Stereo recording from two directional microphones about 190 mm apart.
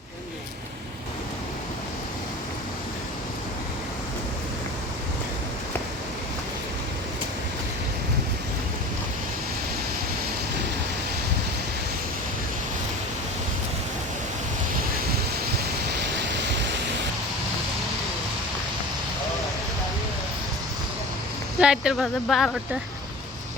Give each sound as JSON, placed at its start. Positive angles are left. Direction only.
{"t": 16.1, "sound": "waves", "side_deg": -65}
{"t": 21.6, "sound": "speech", "side_deg": -5}